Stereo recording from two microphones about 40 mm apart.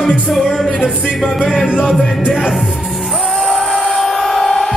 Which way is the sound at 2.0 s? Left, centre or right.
Centre.